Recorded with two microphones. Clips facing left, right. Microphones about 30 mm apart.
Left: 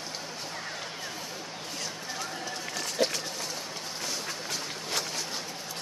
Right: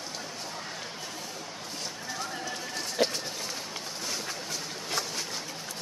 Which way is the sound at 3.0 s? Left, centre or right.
Centre.